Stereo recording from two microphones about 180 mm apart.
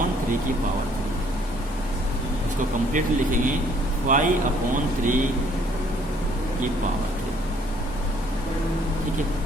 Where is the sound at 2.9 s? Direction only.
45° right (ahead or behind).